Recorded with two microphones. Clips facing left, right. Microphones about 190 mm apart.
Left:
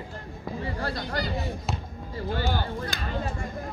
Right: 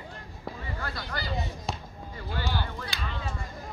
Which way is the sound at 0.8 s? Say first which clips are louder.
Left 4 dB; 40° left (ahead or behind).